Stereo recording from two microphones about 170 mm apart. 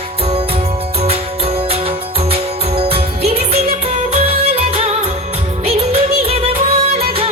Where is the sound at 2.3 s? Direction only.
35° right (ahead or behind).